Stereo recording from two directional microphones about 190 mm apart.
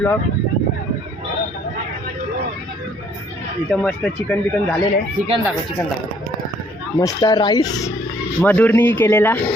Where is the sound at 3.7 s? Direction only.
5° left (ahead or behind).